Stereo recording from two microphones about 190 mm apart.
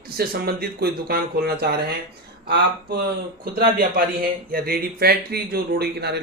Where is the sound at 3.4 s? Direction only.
50° right (ahead or behind).